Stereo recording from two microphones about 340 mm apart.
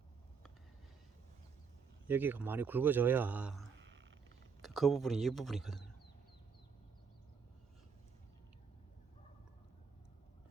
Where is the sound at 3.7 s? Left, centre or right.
Right.